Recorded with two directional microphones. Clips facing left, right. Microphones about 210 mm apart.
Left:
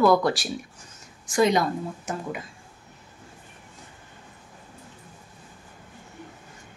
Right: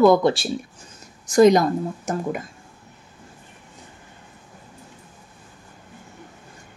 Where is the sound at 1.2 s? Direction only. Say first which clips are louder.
Right 7 dB; 40° right (ahead or behind).